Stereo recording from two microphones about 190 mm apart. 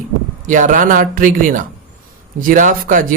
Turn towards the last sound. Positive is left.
turn(degrees=-45)  # may be behind; listen again after turning